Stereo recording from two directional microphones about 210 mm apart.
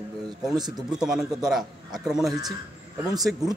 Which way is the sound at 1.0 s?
Centre (ahead or behind).